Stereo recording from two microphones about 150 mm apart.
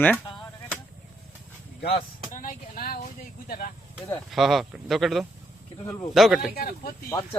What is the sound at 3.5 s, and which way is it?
Speech, 70° left (ahead or behind).